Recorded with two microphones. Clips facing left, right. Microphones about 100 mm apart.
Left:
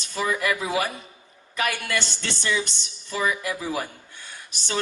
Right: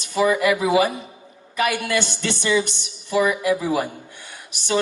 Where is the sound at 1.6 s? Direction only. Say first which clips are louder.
Right 5 dB; 15° right (ahead or behind).